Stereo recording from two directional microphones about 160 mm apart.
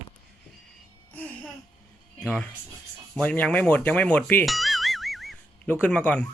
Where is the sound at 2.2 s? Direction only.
Centre (ahead or behind).